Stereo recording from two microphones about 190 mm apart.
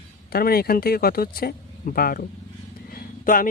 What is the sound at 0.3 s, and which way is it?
Speech, 55° left (ahead or behind).